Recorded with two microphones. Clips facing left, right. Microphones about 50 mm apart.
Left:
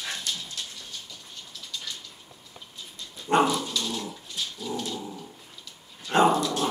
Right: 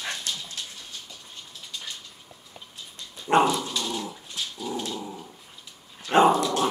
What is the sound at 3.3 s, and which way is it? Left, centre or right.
Dog, right.